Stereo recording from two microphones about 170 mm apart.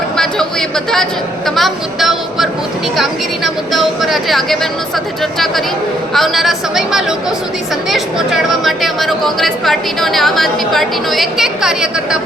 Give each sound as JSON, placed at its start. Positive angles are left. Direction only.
{"t": 1.5, "sound": "speech", "side_deg": 0}